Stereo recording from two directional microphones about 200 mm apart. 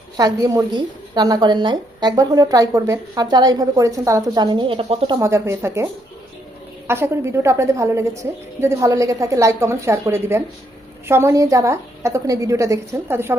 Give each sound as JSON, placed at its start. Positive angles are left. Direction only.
{"t": 0.2, "sound": "a woman's voice", "side_deg": -20}
{"t": 5.2, "sound": "a woman's voice", "side_deg": -15}